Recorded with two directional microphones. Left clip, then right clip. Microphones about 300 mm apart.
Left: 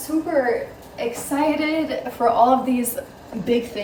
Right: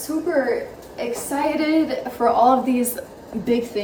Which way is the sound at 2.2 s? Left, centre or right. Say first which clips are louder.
Even; centre.